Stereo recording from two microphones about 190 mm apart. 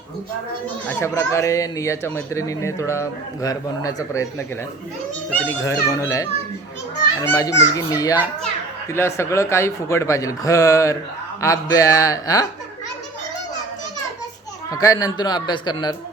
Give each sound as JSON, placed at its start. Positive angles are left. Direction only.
{"t": 0.9, "sound": "speech", "side_deg": 10}
{"t": 14.7, "sound": "a man's voice", "side_deg": 20}